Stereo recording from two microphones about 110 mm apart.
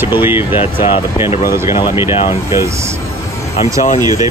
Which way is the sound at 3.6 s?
35° right (ahead or behind).